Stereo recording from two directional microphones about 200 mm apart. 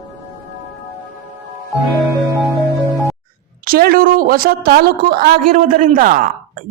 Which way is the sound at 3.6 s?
50° right (ahead or behind).